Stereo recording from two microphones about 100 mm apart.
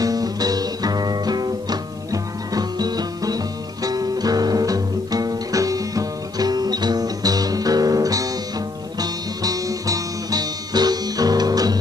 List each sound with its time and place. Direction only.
0.0 s music: 40° right (ahead or behind)